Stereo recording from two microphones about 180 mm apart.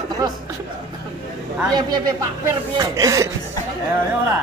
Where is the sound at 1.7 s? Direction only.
20° right (ahead or behind).